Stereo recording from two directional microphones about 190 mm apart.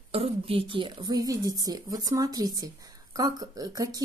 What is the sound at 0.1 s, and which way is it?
Speech, 30° right (ahead or behind).